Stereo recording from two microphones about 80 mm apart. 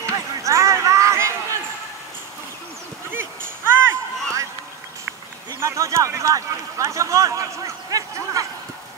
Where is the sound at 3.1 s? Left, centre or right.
Right.